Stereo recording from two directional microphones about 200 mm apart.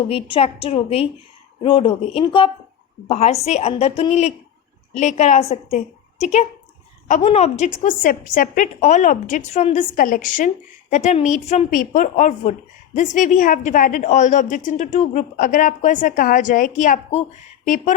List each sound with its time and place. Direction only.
0.1 s a woman's voice: 30° left (ahead or behind)